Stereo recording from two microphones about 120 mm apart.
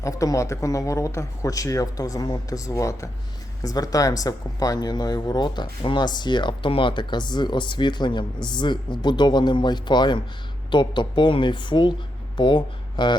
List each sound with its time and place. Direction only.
0.0 s speech: 25° left (ahead or behind)